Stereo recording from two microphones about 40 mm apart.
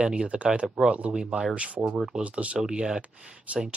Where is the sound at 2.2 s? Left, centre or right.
Right.